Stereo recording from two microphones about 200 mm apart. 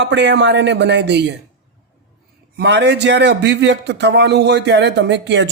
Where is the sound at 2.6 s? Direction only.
60° right (ahead or behind).